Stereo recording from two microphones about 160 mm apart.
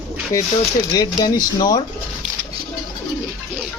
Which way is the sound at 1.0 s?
25° left (ahead or behind).